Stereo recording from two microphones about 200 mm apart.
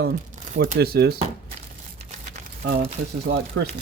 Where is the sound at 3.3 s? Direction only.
50° right (ahead or behind).